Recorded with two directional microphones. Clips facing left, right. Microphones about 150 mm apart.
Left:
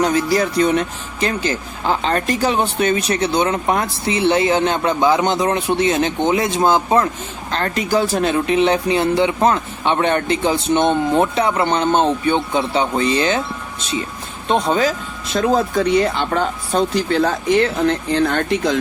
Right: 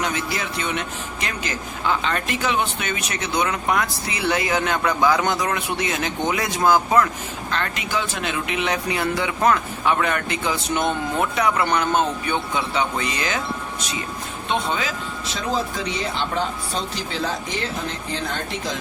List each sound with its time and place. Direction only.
0.0 s speech: 35° left (ahead or behind)
7.5 s speech: 35° left (ahead or behind)
14.4 s speech: 35° left (ahead or behind); by 18.7 s 65° left (ahead or behind)